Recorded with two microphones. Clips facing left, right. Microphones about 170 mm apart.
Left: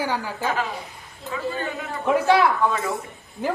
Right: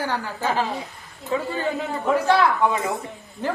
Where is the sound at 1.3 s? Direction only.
30° right (ahead or behind).